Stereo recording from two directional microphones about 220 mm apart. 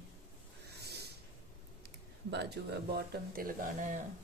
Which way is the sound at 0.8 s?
50° right (ahead or behind).